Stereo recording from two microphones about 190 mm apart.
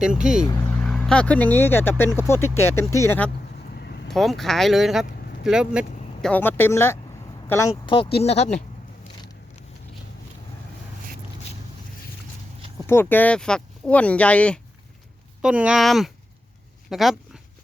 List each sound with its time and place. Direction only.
0.0 s speech: 5° right (ahead or behind)
0.4 s speech: 10° left (ahead or behind)
3.8 s vehicle: 60° left (ahead or behind)
4.1 s speech: centre (ahead or behind)
6.2 s speech: 10° left (ahead or behind)
8.2 s speech: 35° left (ahead or behind)
12.9 s speech: 10° left (ahead or behind)
15.4 s speech: 5° right (ahead or behind)